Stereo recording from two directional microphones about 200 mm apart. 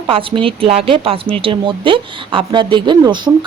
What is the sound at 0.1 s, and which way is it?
Speech, 25° right (ahead or behind).